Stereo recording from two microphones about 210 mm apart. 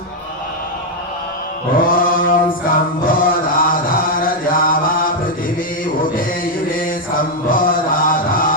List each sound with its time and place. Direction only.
1.7 s mantra: 40° left (ahead or behind)
3.1 s chant: 40° left (ahead or behind)
5.8 s a sound: 40° left (ahead or behind)